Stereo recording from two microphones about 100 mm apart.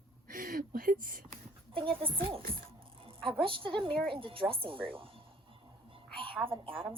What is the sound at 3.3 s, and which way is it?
A woman's voice, 60° right (ahead or behind).